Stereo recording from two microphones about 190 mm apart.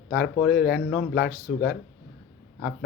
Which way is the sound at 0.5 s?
50° left (ahead or behind).